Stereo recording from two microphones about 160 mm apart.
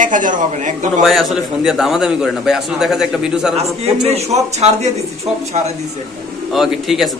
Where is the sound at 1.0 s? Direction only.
Centre (ahead or behind).